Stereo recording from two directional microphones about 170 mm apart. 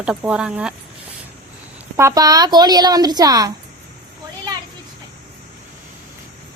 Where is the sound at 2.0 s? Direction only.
20° right (ahead or behind).